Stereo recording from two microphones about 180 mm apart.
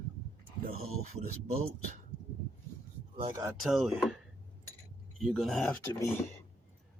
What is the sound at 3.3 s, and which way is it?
Speech, 20° right (ahead or behind).